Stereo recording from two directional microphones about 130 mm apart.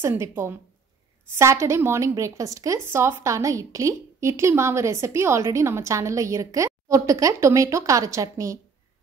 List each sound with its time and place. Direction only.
0.0 s a woman's voice: 20° right (ahead or behind)